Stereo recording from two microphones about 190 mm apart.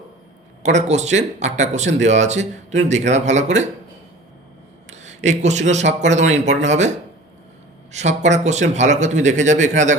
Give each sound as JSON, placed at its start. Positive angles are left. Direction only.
{"t": 0.6, "sound": "speech", "side_deg": -35}
{"t": 4.9, "sound": "a man's voice", "side_deg": -40}
{"t": 7.9, "sound": "speech", "side_deg": -40}